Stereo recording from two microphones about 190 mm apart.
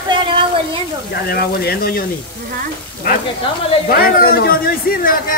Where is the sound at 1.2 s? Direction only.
55° left (ahead or behind).